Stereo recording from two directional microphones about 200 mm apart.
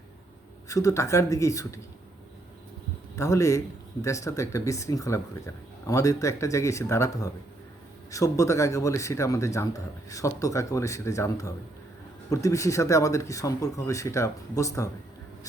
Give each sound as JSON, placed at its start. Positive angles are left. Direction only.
{"t": 0.7, "sound": "speech", "side_deg": 15}
{"t": 3.2, "sound": "speech", "side_deg": 15}